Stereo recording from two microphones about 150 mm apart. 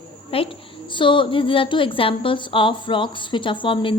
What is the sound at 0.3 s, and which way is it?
A woman's voice, 40° left (ahead or behind).